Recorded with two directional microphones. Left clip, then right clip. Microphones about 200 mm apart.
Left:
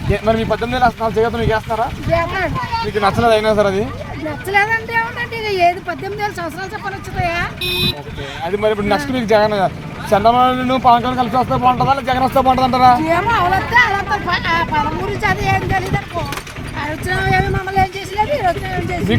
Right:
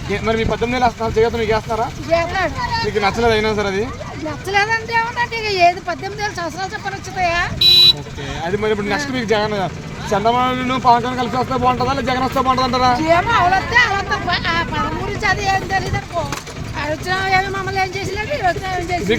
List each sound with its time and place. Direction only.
0.1 s speech: 35° left (ahead or behind)
2.0 s speech: centre (ahead or behind)
3.0 s speech: 35° left (ahead or behind)
4.4 s speech: centre (ahead or behind)
7.6 s speech: 55° right (ahead or behind)
8.4 s speech: 40° left (ahead or behind)
13.1 s speech: 5° right (ahead or behind)
16.8 s speech: 10° right (ahead or behind)